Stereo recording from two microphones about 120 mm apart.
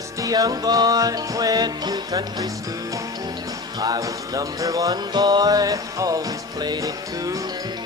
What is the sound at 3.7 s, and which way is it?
Music, 30° right (ahead or behind).